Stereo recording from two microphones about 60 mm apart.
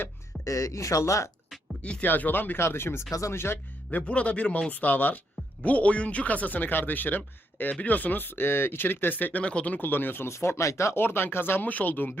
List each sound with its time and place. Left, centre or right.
0.4 s speech: left
1.8 s speech: left
2.0 s speech: left
3.1 s speech: left
3.3 s speech: left
3.9 s speech: left
10.2 s speech: left
10.9 s speech: left